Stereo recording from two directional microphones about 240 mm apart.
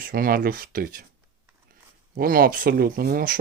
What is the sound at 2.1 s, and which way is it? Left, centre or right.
Speech, right.